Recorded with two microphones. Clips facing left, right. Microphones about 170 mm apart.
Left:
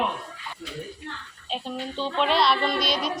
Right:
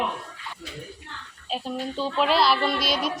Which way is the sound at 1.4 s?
Centre (ahead or behind).